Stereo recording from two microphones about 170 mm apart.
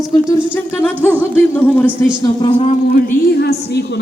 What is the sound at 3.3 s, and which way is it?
Speech, 75° left (ahead or behind).